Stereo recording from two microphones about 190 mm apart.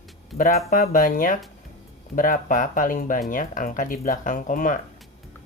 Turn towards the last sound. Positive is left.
turn(degrees=45)  # may be behind; listen again after turning